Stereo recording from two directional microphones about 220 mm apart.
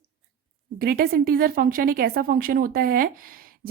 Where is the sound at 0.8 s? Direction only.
40° right (ahead or behind).